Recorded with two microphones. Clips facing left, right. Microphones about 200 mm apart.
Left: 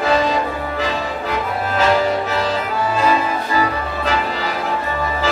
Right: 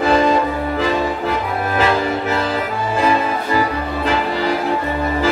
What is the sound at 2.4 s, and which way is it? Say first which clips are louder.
Accordion: even; 55° right (ahead or behind).